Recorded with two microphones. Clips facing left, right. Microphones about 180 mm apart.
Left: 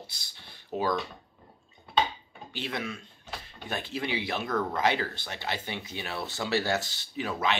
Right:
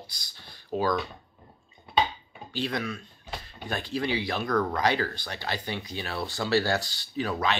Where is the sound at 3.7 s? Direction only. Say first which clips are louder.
Right 3 dB; 20° left (ahead or behind).